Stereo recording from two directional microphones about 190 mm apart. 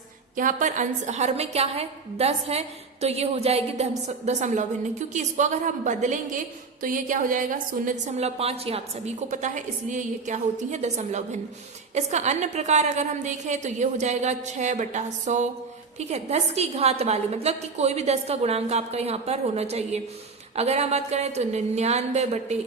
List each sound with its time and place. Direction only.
0.3 s a woman's voice: 40° right (ahead or behind)